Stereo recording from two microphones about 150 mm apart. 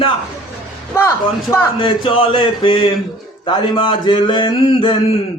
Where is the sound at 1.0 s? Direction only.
15° left (ahead or behind).